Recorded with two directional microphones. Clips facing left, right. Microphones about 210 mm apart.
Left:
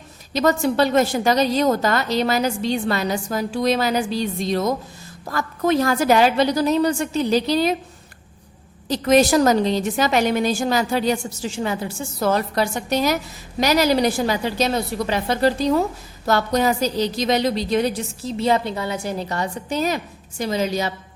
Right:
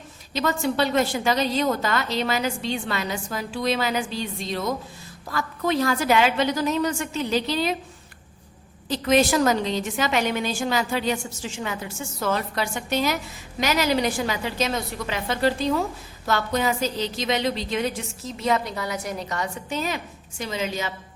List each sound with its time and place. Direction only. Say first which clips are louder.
0.3 s a woman's voice: left 5 dB; 40° left (ahead or behind)
8.9 s a woman's voice: left 4 dB; 40° left (ahead or behind)